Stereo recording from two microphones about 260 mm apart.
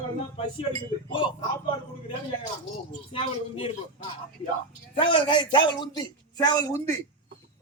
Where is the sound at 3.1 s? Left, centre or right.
Left.